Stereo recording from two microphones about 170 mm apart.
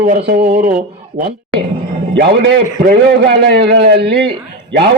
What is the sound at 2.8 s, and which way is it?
A man's voice, 65° right (ahead or behind).